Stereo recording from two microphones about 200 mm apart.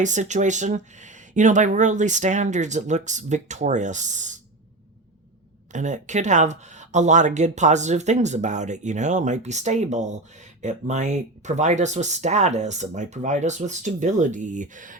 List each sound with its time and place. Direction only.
0.0 s speech: 35° right (ahead or behind)
5.7 s speech: 40° right (ahead or behind)